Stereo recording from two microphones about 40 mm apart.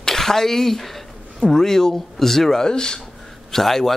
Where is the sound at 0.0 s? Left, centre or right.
Centre.